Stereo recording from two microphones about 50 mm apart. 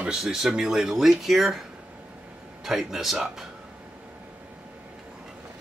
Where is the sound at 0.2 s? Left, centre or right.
Centre.